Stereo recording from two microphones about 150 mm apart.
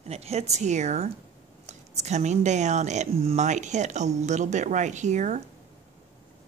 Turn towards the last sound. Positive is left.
turn(degrees=-50)  # may be behind; listen again after turning